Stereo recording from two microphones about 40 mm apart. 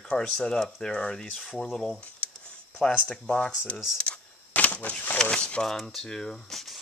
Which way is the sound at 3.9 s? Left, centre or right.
Left.